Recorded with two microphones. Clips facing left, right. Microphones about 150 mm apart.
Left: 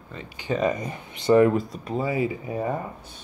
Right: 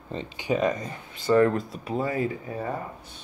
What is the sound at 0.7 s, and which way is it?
Speech, 15° left (ahead or behind).